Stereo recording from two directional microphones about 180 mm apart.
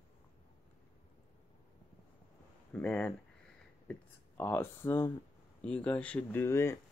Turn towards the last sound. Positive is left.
turn(degrees=15)  # may be behind; listen again after turning